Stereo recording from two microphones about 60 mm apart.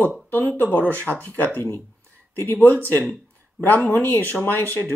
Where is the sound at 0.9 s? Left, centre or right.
Right.